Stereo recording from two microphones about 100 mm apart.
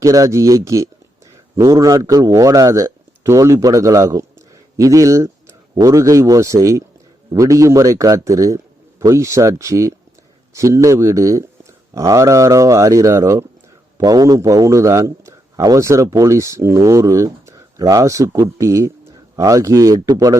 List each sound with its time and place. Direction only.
0.0 s a man's voice: 35° right (ahead or behind)